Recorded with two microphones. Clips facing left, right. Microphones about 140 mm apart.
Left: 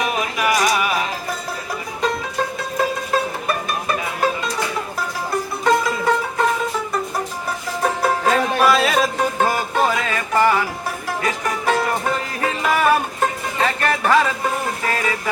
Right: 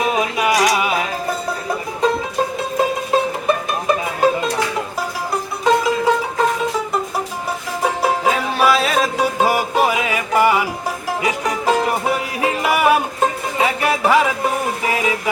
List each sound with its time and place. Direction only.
0.0 s music: 25° right (ahead or behind)
2.7 s music: 20° right (ahead or behind)
5.6 s music: 15° right (ahead or behind)
7.8 s music: 10° right (ahead or behind)
13.6 s a sound: 10° right (ahead or behind)